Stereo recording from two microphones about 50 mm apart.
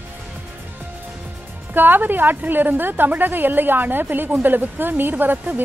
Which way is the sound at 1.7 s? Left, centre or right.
Right.